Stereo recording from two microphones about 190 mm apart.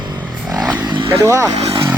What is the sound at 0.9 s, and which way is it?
Vehicle, 25° right (ahead or behind).